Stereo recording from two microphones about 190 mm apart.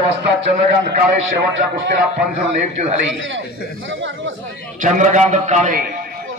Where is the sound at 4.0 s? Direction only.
80° right.